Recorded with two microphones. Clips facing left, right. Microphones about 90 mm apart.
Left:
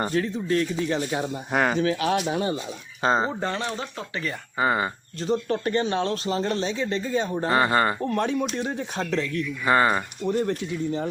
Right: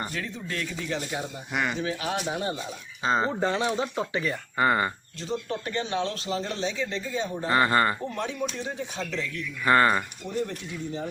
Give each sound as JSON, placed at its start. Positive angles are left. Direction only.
{"t": 0.0, "sound": "speech", "side_deg": 35}
{"t": 1.1, "sound": "speech", "side_deg": 50}
{"t": 1.8, "sound": "speech", "side_deg": 75}
{"t": 3.0, "sound": "speech", "side_deg": 45}
{"t": 3.4, "sound": "speech", "side_deg": -10}
{"t": 4.5, "sound": "speech", "side_deg": 15}
{"t": 5.2, "sound": "speech", "side_deg": 50}
{"t": 7.5, "sound": "speech", "side_deg": 20}
{"t": 8.0, "sound": "speech", "side_deg": 60}
{"t": 9.6, "sound": "speech", "side_deg": 15}
{"t": 10.2, "sound": "speech", "side_deg": 65}